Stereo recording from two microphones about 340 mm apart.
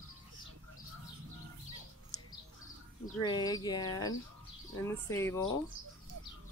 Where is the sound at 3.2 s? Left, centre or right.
Centre.